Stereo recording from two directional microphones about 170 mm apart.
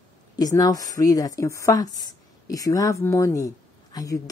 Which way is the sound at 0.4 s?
20° left (ahead or behind).